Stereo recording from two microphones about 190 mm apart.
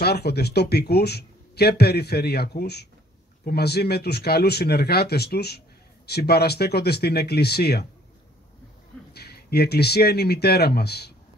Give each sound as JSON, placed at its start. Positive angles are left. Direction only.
{"t": 0.0, "sound": "speech", "side_deg": 60}
{"t": 9.1, "sound": "speech", "side_deg": 55}